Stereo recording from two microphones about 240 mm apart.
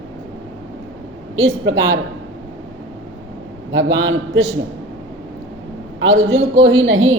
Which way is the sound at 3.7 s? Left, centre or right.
Right.